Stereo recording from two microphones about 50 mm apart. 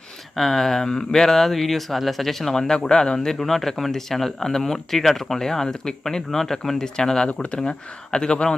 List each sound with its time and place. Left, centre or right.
0.3 s speech: centre